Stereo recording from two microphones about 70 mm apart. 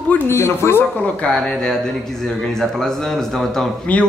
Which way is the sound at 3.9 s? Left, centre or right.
Centre.